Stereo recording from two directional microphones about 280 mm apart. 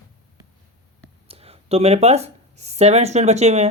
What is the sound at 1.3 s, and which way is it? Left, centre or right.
Speech, right.